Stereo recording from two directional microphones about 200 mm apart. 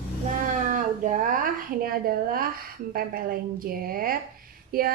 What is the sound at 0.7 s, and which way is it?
A woman's voice, 40° right (ahead or behind).